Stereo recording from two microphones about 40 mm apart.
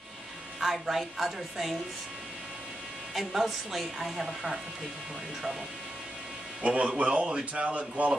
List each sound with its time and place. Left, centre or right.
0.6 s speech: centre
3.2 s speech: centre
6.6 s speech: right